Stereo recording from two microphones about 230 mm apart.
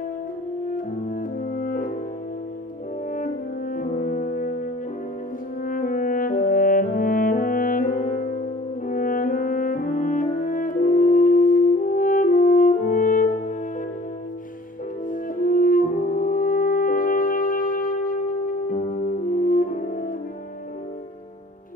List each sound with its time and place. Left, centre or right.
0.7 s french horn: left
3.1 s french horn: left
15.0 s french horn: left
19.3 s french horn: left